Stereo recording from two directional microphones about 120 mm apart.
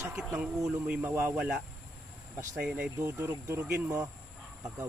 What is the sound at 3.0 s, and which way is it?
Speech, 25° right (ahead or behind).